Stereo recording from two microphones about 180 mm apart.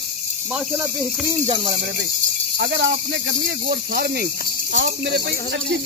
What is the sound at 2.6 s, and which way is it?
Speech, 75° right (ahead or behind).